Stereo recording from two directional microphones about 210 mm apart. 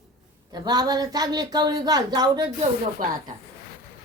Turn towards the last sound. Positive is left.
turn(degrees=-40)  # may be behind; listen again after turning